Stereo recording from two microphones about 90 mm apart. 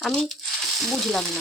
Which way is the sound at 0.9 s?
Centre (ahead or behind).